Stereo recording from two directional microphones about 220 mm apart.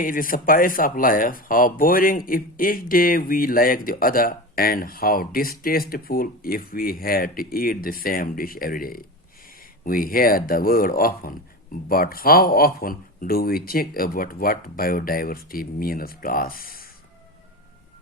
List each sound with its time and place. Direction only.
0.0 s speech: 40° left (ahead or behind)